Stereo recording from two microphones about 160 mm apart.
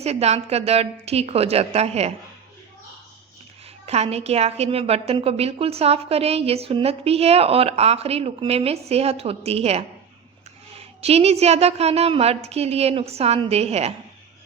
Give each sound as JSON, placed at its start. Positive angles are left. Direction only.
{"t": 0.0, "sound": "a woman's voice", "side_deg": -40}
{"t": 3.8, "sound": "a woman's voice", "side_deg": -40}